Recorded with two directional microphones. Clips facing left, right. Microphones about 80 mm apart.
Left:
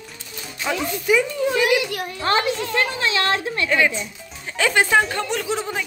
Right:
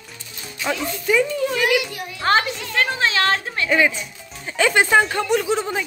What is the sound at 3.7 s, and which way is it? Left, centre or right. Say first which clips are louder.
Speech: right 2 dB; centre.